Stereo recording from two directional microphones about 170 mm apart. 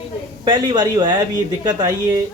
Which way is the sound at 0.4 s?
25° right (ahead or behind).